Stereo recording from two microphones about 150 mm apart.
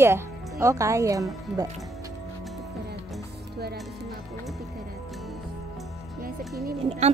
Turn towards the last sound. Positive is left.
turn(degrees=-45)  # may be behind; listen again after turning